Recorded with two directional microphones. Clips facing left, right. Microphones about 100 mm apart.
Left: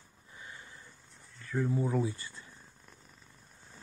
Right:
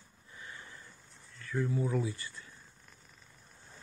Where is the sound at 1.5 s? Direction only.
30° left (ahead or behind).